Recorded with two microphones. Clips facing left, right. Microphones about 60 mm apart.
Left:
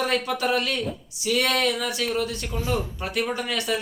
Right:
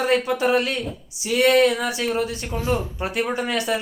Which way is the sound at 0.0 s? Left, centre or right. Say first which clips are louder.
Right 4 dB; right.